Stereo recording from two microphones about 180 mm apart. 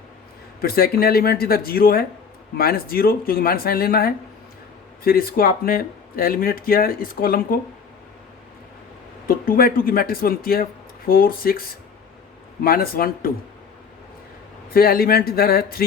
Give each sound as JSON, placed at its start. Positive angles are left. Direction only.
{"t": 0.6, "sound": "speech", "side_deg": 55}
{"t": 9.2, "sound": "speech", "side_deg": 55}
{"t": 12.6, "sound": "speech", "side_deg": 55}
{"t": 14.7, "sound": "speech", "side_deg": 55}